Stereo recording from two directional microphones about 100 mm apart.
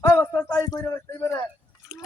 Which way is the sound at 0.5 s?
35° left (ahead or behind).